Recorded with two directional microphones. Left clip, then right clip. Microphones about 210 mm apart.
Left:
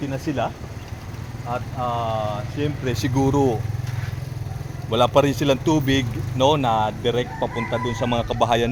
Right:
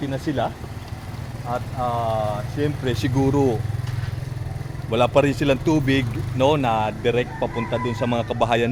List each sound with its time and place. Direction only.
0.1 s speech: centre (ahead or behind)
4.9 s speech: 5° left (ahead or behind)